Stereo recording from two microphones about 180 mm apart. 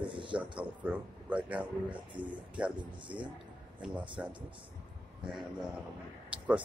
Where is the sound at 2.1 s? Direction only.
25° right (ahead or behind).